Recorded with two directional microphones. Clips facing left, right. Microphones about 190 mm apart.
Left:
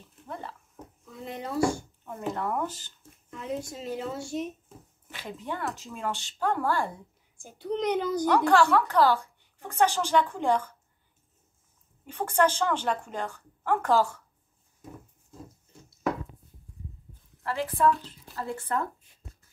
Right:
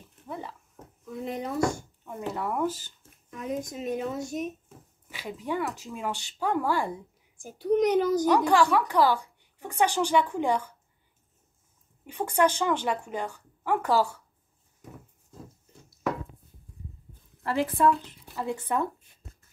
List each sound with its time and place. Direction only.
0.3 s a woman's voice: 15° right (ahead or behind)
1.6 s a sound: 5° left (ahead or behind)
2.1 s a woman's voice: 10° right (ahead or behind)
3.8 s a woman's voice: 20° right (ahead or behind)
7.8 s speech: 20° left (ahead or behind)
8.3 s a woman's voice: 15° right (ahead or behind)
12.1 s a woman's voice: 15° right (ahead or behind)
17.4 s a woman's voice: 15° right (ahead or behind)